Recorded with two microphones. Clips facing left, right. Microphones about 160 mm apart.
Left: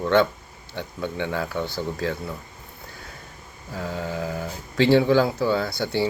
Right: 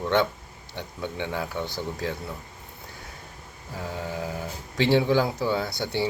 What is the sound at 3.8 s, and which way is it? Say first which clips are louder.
Speech: left 3 dB; 15° right (ahead or behind).